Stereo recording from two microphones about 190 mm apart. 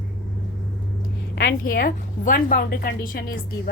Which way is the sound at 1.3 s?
55° left (ahead or behind).